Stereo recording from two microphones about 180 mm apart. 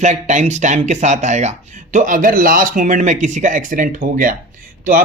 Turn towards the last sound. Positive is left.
turn(degrees=-50)  # may be behind; listen again after turning